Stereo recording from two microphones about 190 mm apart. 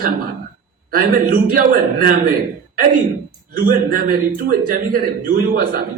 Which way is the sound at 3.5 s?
50° right (ahead or behind).